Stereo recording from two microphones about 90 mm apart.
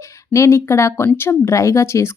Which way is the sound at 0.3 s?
30° left (ahead or behind).